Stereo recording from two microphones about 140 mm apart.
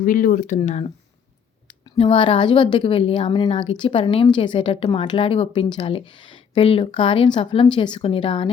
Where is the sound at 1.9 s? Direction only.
40° left (ahead or behind).